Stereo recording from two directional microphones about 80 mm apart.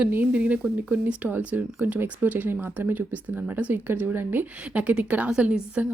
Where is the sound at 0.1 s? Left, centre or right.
Right.